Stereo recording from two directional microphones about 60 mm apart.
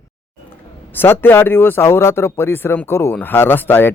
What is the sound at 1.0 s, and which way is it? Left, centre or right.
Speech, left.